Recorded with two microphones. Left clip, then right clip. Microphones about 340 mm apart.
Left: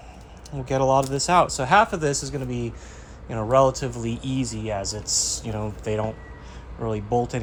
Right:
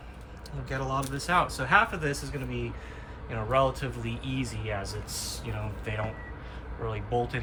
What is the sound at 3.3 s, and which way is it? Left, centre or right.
Speech, centre.